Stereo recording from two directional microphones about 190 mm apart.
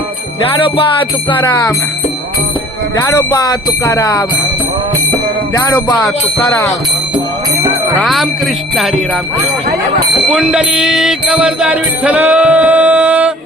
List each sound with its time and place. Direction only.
1.3 s speech: 25° left (ahead or behind)
3.0 s speech: 20° left (ahead or behind)
5.5 s jingle bell: 15° left (ahead or behind)
5.9 s jingle bell: 5° left (ahead or behind)
7.9 s jingle bell: centre (ahead or behind)
10.2 s music: 5° right (ahead or behind)